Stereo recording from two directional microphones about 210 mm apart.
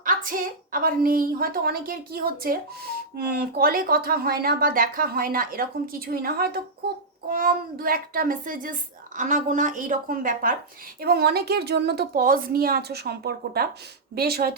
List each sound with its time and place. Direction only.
0.0 s a woman's voice: 40° right (ahead or behind)